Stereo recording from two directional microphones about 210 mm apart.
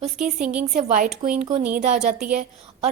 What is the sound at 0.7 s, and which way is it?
A woman's voice, 40° right (ahead or behind).